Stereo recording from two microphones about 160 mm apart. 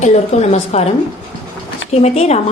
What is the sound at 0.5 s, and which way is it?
Speech, 40° left (ahead or behind).